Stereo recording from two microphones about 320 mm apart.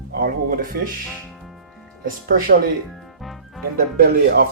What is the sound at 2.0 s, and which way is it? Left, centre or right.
Speech, right.